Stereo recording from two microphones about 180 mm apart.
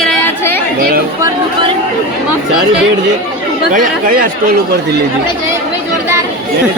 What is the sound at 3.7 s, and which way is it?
Speech, 50° right (ahead or behind).